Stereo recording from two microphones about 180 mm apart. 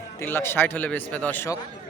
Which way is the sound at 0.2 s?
10° left (ahead or behind).